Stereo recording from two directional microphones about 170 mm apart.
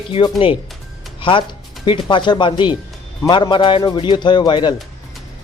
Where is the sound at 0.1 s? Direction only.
30° left (ahead or behind).